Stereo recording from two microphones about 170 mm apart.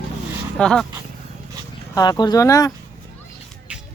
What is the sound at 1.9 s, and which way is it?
Speech, 20° left (ahead or behind).